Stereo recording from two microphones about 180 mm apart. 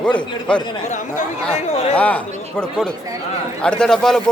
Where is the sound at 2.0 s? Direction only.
5° left (ahead or behind).